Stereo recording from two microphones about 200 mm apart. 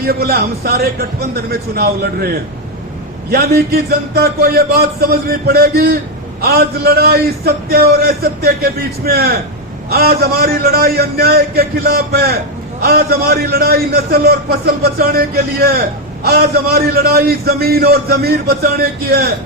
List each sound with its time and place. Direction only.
0.0 s a man's voice: 50° right (ahead or behind)